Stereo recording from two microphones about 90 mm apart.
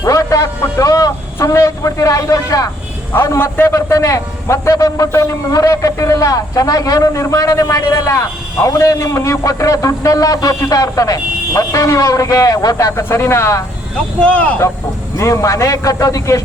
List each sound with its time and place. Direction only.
0.0 s a sound: 40° left (ahead or behind)
0.8 s a man's voice: 40° left (ahead or behind)
3.1 s a man's voice: 25° left (ahead or behind)
14.2 s speech: 15° left (ahead or behind)
15.2 s a man's voice: 35° left (ahead or behind)